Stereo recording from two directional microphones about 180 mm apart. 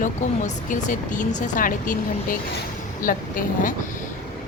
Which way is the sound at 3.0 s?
50° left (ahead or behind).